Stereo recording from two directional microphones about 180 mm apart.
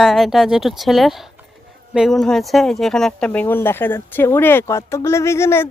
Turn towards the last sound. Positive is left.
turn(degrees=15)  # may be behind; listen again after turning